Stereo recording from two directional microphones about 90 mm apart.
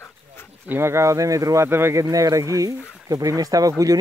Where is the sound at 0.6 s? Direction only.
25° right (ahead or behind).